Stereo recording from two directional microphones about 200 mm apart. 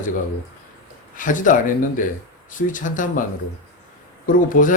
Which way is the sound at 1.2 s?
40° left (ahead or behind).